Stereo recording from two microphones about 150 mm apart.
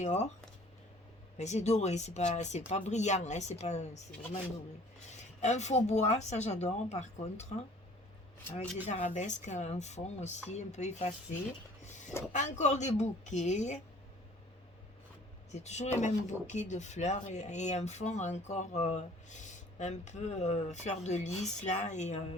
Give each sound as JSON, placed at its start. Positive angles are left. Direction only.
{"t": 0.0, "sound": "speech", "side_deg": 45}
{"t": 1.4, "sound": "speech", "side_deg": 50}
{"t": 5.4, "sound": "speech", "side_deg": 50}
{"t": 8.9, "sound": "speech", "side_deg": 55}
{"t": 15.5, "sound": "speech", "side_deg": 50}